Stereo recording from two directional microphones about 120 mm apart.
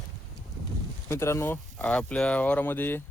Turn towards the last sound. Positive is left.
turn(degrees=15)  # may be behind; listen again after turning